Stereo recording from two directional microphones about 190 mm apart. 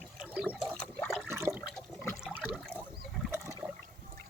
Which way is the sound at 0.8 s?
10° left (ahead or behind).